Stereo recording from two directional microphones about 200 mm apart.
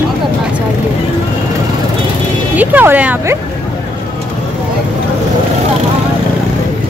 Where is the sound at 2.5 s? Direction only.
10° right (ahead or behind).